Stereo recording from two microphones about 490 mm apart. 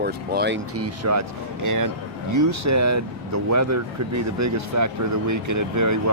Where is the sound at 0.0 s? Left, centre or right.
Centre.